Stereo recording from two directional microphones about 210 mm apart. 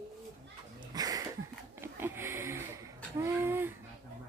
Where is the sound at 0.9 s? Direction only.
20° right (ahead or behind).